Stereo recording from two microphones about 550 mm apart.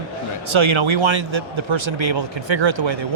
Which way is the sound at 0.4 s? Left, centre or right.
Right.